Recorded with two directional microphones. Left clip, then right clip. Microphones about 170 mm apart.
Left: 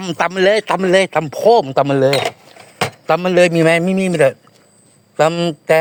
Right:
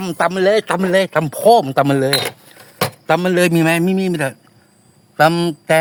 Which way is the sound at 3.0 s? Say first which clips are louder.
Left 3 dB; 25° left (ahead or behind).